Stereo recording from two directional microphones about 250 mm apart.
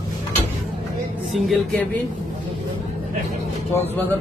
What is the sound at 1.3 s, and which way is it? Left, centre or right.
Speech, centre.